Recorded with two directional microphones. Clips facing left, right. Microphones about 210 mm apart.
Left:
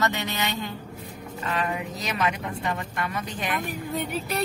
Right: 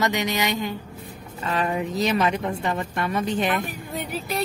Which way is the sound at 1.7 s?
30° right (ahead or behind).